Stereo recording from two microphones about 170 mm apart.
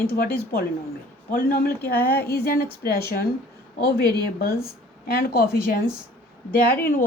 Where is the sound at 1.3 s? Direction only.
60° left (ahead or behind).